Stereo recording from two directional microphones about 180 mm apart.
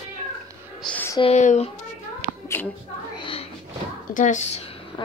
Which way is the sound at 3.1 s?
30° left (ahead or behind).